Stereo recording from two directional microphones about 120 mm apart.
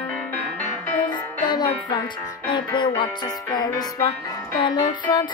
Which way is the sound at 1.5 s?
35° left (ahead or behind).